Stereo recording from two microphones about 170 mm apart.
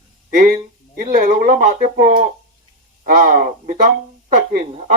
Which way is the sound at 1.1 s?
55° right (ahead or behind).